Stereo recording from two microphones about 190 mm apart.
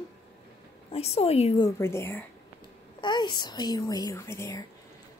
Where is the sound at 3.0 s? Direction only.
25° left (ahead or behind).